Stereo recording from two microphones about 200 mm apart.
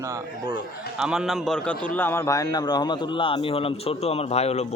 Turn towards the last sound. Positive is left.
turn(degrees=30)  # may be behind; listen again after turning